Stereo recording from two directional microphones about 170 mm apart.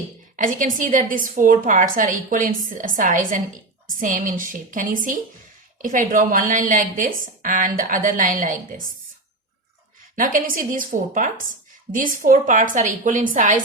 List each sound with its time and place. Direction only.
0.3 s a woman's voice: 50° right (ahead or behind)
10.2 s a woman's voice: 55° right (ahead or behind)